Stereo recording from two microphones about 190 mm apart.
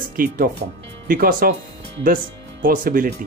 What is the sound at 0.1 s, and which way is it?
Speech, 50° right (ahead or behind).